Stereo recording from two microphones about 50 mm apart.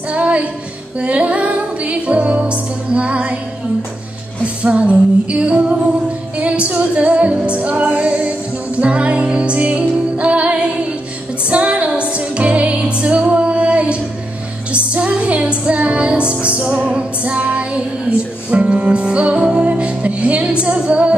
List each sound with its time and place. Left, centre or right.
0.1 s music: right
4.6 s female singing: right
6.3 s music: right
20.6 s female singing: right